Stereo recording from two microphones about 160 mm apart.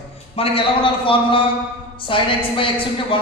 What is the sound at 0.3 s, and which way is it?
A woman's voice, 35° left (ahead or behind).